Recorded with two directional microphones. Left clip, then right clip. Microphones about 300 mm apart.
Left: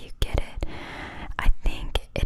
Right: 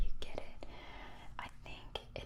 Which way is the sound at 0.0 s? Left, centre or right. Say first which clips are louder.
Left 14 dB; left.